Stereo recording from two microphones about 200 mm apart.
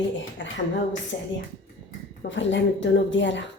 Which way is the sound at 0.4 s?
65° left (ahead or behind).